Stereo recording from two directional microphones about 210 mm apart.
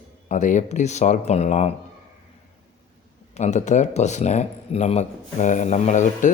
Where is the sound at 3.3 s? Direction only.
35° left (ahead or behind).